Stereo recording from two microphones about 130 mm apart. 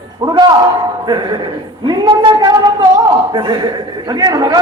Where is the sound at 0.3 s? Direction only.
35° right (ahead or behind).